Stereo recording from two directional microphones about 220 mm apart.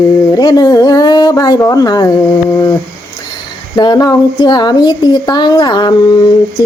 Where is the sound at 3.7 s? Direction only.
20° left (ahead or behind).